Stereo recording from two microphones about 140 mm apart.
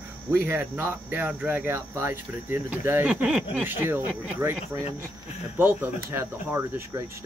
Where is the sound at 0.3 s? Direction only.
15° right (ahead or behind).